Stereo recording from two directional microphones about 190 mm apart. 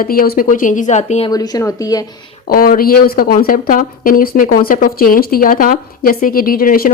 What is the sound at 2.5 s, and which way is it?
Speech, 50° left (ahead or behind).